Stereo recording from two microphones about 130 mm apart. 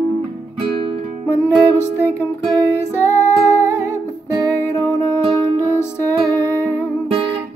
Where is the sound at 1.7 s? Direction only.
15° left (ahead or behind).